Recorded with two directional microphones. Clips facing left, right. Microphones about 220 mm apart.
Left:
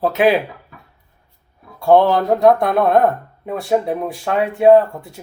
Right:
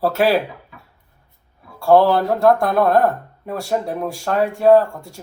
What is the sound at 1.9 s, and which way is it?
Speech, 5° right (ahead or behind).